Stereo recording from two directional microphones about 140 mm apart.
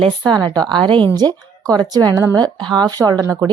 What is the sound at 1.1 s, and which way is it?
Speech, 30° right (ahead or behind).